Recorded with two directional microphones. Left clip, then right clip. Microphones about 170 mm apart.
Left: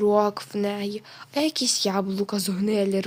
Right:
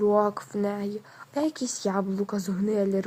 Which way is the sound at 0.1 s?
15° left (ahead or behind).